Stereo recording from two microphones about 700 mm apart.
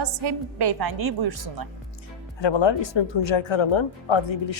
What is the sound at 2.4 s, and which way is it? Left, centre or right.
Speech, left.